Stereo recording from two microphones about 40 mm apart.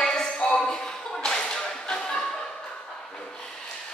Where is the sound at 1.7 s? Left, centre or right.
Centre.